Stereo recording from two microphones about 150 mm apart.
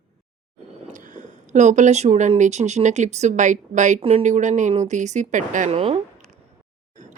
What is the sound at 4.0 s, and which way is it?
Speech, 40° right (ahead or behind).